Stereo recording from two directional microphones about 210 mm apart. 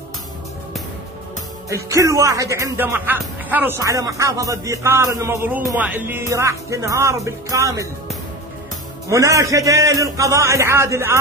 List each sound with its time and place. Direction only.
1.7 s speech: 15° right (ahead or behind)
9.1 s speech: 15° right (ahead or behind)